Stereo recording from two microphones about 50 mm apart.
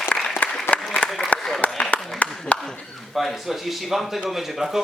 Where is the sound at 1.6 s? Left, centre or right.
Left.